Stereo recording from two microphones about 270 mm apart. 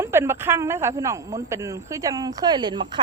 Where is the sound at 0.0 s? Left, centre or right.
Centre.